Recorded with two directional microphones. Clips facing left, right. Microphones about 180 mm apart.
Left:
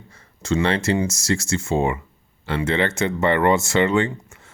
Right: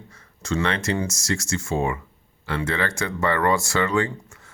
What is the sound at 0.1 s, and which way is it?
Speech, 25° left (ahead or behind).